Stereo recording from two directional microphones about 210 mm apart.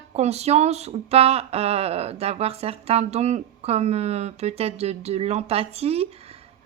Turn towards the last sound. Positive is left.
turn(degrees=-30)  # may be behind; listen again after turning